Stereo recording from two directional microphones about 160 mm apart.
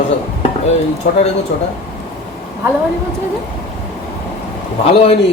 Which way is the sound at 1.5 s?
90° left.